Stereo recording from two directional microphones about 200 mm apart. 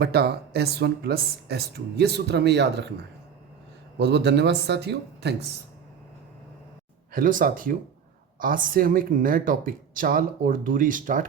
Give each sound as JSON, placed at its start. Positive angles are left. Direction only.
{"t": 0.0, "sound": "speech", "side_deg": -55}
{"t": 3.9, "sound": "speech", "side_deg": -60}
{"t": 7.1, "sound": "speech", "side_deg": -45}